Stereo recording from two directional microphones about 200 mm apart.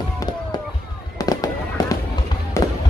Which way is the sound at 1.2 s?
20° left (ahead or behind).